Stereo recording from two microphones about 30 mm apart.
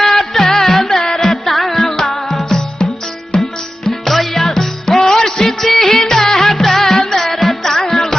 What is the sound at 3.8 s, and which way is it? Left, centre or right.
Music, centre.